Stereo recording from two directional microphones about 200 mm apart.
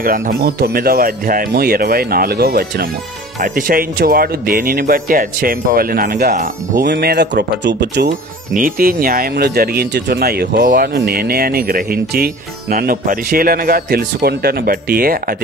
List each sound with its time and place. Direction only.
0.0 s speech: 50° right (ahead or behind)
6.9 s speech: 55° right (ahead or behind)
8.1 s speech: 45° right (ahead or behind)